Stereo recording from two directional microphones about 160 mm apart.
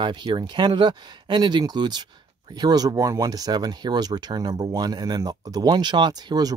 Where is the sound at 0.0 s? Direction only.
30° right (ahead or behind).